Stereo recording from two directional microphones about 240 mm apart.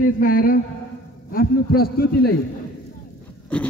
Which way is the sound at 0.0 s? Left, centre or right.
Left.